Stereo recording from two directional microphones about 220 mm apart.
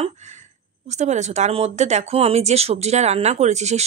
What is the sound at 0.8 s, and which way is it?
Speech, 30° right (ahead or behind).